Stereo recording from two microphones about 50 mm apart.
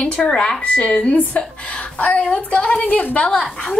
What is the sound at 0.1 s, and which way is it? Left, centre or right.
Speech, left.